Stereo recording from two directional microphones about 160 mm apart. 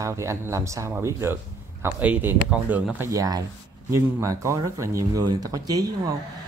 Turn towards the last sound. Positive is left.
turn(degrees=-25)  # may be behind; listen again after turning